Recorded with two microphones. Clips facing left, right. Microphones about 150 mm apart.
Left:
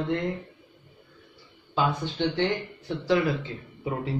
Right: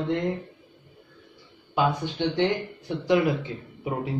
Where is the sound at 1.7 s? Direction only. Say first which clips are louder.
Right 2 dB; 15° right (ahead or behind).